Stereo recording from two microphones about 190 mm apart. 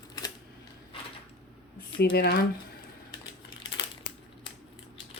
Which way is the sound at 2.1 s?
55° left (ahead or behind).